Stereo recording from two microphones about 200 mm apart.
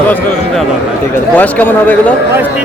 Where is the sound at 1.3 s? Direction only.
10° left (ahead or behind).